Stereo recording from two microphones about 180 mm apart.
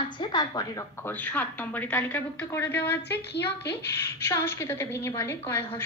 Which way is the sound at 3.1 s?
70° left (ahead or behind).